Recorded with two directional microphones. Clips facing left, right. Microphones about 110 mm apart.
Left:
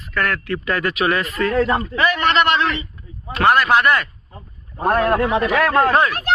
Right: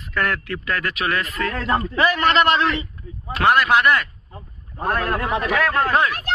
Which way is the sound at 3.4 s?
Centre (ahead or behind).